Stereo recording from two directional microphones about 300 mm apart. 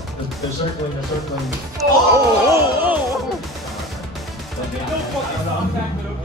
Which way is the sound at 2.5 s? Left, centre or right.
Centre.